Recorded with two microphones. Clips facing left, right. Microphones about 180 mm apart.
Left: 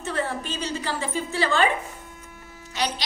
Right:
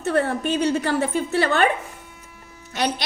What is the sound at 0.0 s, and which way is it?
A woman's voice, 60° right (ahead or behind).